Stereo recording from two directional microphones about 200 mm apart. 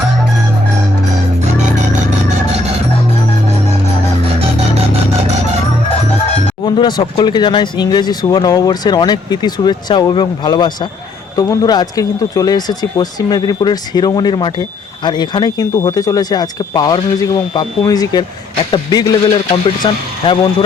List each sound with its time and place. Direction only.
6.7 s speech: 20° left (ahead or behind)